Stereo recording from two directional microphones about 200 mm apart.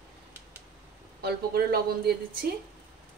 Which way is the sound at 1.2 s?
50° right (ahead or behind).